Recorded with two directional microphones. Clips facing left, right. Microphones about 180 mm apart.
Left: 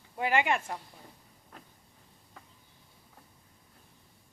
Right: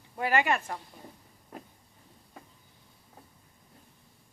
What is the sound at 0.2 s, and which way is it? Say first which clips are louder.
Speech: right 1 dB; 15° left (ahead or behind).